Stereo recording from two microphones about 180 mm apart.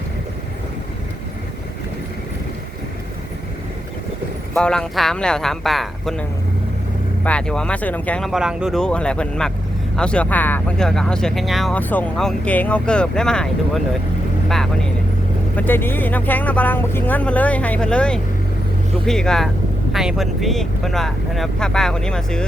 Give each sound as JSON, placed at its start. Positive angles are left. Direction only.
{"t": 4.5, "sound": "speech", "side_deg": 5}
{"t": 7.3, "sound": "speech", "side_deg": 5}
{"t": 15.5, "sound": "speech", "side_deg": 10}